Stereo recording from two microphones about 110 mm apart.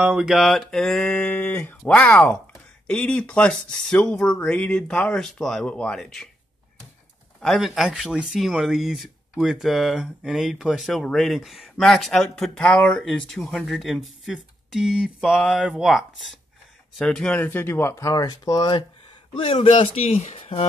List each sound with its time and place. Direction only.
0.0 s speech: 5° right (ahead or behind)
1.0 s speech: 15° left (ahead or behind)
1.8 s speech: 5° left (ahead or behind)
7.3 s speech: centre (ahead or behind); by 18.9 s 45° left (ahead or behind)
19.3 s a man's voice: 60° left (ahead or behind)